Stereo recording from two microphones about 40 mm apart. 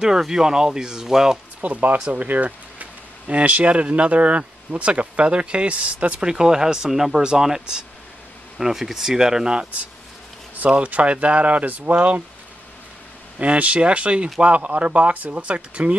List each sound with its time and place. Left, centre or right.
0.0 s speech: centre
1.6 s speech: right
6.2 s speech: centre; by 12.2 s right
13.4 s speech: right